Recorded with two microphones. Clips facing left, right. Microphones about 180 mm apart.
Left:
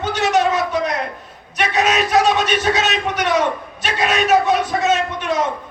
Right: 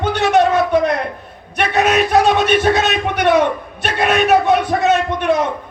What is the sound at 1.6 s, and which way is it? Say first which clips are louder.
A man's voice: right 3 dB; 55° right (ahead or behind).